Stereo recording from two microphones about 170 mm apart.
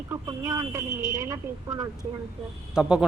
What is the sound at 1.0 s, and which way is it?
Speech, 50° right (ahead or behind).